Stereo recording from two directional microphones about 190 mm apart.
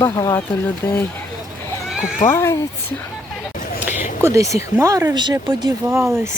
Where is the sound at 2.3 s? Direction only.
15° left (ahead or behind).